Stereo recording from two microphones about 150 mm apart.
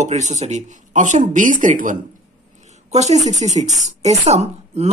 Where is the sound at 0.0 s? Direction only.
50° right (ahead or behind).